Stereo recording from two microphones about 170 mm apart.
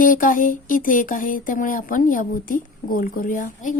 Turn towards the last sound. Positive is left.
turn(degrees=50)  # may be behind; listen again after turning